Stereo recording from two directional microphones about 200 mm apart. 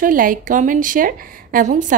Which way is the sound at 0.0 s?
45° right (ahead or behind).